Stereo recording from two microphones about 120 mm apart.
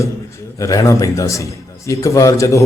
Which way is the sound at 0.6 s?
25° left (ahead or behind).